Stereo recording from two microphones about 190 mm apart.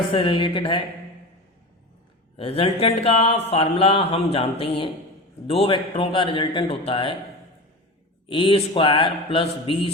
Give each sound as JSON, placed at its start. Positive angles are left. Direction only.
{"t": 0.1, "sound": "a man's voice", "side_deg": 30}
{"t": 2.3, "sound": "a man's voice", "side_deg": 30}
{"t": 8.3, "sound": "a man's voice", "side_deg": 30}